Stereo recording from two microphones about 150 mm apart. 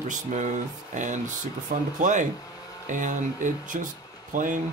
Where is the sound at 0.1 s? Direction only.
55° right (ahead or behind).